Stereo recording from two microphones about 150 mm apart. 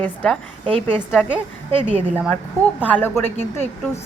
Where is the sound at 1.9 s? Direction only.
10° right (ahead or behind).